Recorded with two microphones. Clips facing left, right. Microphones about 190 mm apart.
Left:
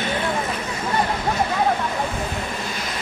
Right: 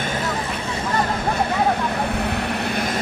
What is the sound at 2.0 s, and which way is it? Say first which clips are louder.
Vehicle: right 3 dB; 65° right (ahead or behind).